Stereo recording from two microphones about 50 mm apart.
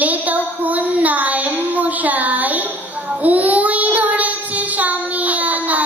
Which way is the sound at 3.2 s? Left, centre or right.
Right.